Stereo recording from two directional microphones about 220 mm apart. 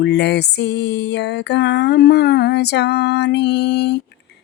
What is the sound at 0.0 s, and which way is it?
Music, 50° left (ahead or behind).